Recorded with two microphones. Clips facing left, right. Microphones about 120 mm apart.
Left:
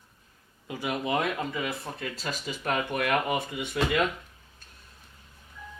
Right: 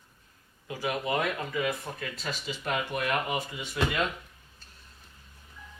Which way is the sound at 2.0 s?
40° left (ahead or behind).